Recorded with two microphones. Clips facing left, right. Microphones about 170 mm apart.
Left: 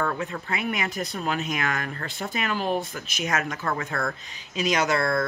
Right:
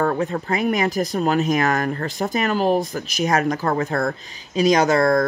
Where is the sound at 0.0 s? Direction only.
35° right (ahead or behind).